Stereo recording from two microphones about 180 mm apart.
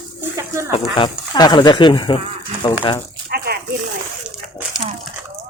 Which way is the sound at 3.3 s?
55° right (ahead or behind).